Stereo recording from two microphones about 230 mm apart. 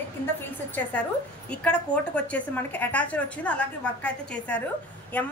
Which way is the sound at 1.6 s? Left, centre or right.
Centre.